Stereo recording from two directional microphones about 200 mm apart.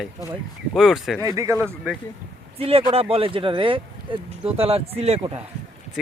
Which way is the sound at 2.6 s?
30° right (ahead or behind).